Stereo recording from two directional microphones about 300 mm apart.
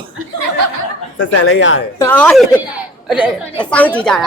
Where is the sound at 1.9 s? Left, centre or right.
Centre.